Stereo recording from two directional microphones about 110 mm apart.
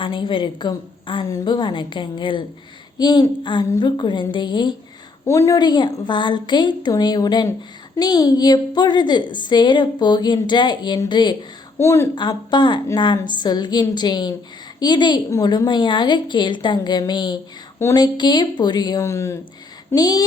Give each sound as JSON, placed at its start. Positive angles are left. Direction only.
{"t": 0.0, "sound": "a woman's voice", "side_deg": 50}
{"t": 1.3, "sound": "a woman's voice", "side_deg": 40}
{"t": 5.2, "sound": "a woman's voice", "side_deg": 25}
{"t": 5.5, "sound": "a woman's voice", "side_deg": 40}
{"t": 11.8, "sound": "a woman's voice", "side_deg": 25}
{"t": 12.5, "sound": "a woman's voice", "side_deg": 45}